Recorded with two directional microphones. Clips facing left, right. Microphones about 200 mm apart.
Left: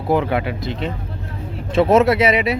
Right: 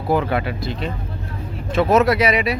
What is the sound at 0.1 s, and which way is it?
Speech, 15° left (ahead or behind).